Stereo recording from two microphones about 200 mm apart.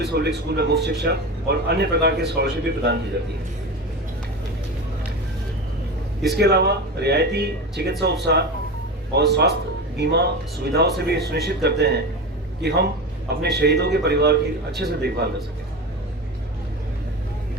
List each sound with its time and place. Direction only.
0.0 s a man's voice: 55° right (ahead or behind)
6.3 s a man's voice: 55° right (ahead or behind)